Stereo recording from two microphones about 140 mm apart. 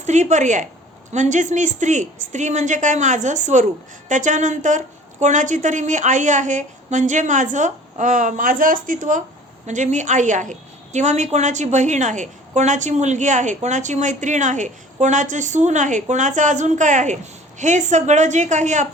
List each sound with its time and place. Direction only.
0.0 s a woman's voice: 55° right (ahead or behind)
9.6 s a woman's voice: 60° right (ahead or behind)